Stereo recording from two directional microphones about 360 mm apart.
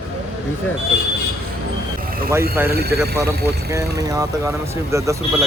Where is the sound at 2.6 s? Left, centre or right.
Centre.